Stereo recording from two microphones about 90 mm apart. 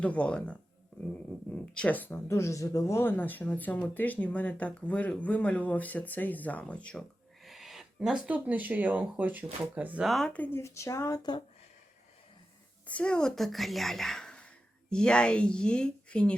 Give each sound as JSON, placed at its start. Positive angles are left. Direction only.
{"t": 0.0, "sound": "speech", "side_deg": 15}
{"t": 3.0, "sound": "speech", "side_deg": 20}
{"t": 7.4, "sound": "speech", "side_deg": 0}
{"t": 10.0, "sound": "a woman's voice", "side_deg": 0}
{"t": 10.3, "sound": "speech", "side_deg": 20}
{"t": 10.6, "sound": "speech", "side_deg": 35}
{"t": 12.9, "sound": "a woman's voice", "side_deg": 10}